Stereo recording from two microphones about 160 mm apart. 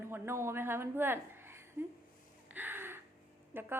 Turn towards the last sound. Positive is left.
turn(degrees=-15)  # may be behind; listen again after turning